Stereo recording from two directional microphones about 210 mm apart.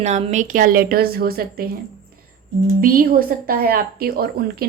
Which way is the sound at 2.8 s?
45° right (ahead or behind).